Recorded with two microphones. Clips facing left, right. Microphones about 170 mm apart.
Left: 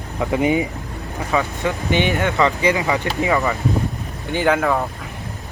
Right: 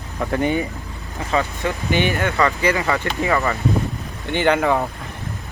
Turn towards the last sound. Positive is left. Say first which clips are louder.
# even
turn(degrees=0)  # may be behind; listen again after turning